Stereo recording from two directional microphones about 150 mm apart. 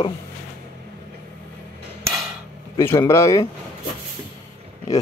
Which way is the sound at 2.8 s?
20° left (ahead or behind).